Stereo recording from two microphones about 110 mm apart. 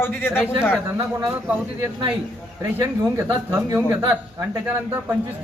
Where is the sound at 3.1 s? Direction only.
20° right (ahead or behind).